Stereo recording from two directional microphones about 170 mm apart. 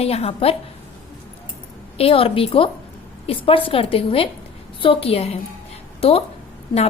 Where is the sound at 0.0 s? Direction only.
35° left (ahead or behind).